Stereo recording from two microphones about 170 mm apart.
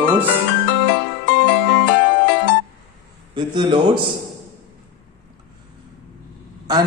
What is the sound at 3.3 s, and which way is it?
Speech, 25° right (ahead or behind).